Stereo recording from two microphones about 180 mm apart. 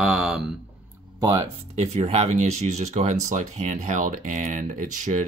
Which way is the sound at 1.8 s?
40° right (ahead or behind).